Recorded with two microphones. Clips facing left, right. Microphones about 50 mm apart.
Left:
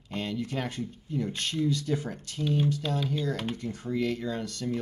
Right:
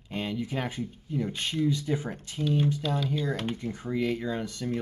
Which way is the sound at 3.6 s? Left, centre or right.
Centre.